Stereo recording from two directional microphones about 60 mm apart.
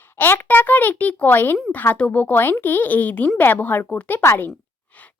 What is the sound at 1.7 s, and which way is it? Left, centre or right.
A woman's voice, left.